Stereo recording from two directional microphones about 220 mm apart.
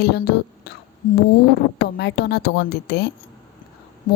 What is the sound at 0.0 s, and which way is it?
Speech, 45° left (ahead or behind).